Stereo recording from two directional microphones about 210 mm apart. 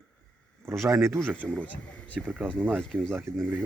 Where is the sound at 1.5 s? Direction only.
5° left (ahead or behind).